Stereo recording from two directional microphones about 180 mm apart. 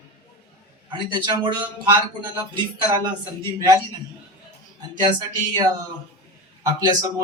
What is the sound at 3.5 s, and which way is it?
Speech, 15° right (ahead or behind).